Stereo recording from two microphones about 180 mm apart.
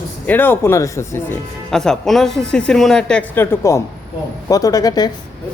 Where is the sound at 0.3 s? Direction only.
10° left (ahead or behind).